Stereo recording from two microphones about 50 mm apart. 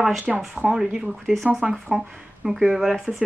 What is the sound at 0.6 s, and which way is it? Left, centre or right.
Speech, centre.